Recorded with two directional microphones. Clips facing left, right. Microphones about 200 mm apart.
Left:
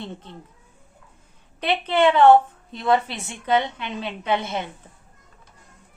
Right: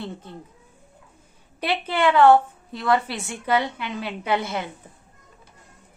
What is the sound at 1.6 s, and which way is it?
A woman's voice, 20° left (ahead or behind).